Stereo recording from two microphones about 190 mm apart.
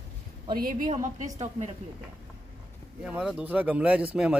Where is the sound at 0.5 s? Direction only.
50° right (ahead or behind).